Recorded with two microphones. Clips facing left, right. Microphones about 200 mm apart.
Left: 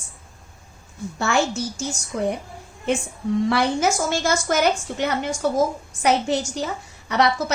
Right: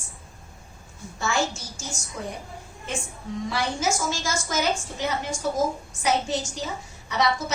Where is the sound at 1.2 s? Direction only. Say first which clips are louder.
Left 5 dB; 60° left (ahead or behind).